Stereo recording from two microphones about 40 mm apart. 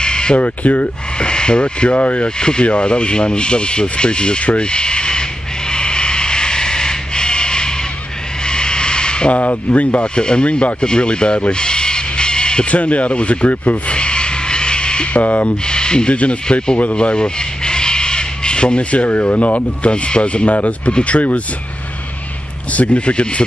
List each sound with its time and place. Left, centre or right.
0.0 s a sound: left
0.4 s speech: left
1.1 s speech: left
2.2 s speech: left
5.7 s a sound: left
9.3 s speech: left
10.1 s speech: left
12.7 s speech: left
13.9 s a sound: left
15.1 s speech: left
15.6 s speech: left
22.7 s speech: left